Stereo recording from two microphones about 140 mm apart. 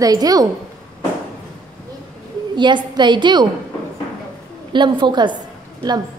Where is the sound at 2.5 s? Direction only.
35° right (ahead or behind).